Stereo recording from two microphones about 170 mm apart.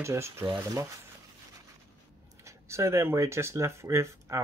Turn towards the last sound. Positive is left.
turn(degrees=-15)  # may be behind; listen again after turning